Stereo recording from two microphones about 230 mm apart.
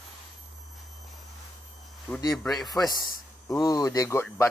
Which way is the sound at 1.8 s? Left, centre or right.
Centre.